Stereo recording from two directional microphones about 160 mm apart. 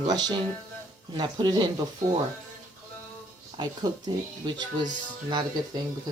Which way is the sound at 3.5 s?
25° right (ahead or behind).